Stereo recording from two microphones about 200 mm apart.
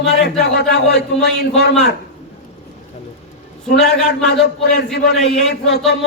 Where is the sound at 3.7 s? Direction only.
Centre (ahead or behind).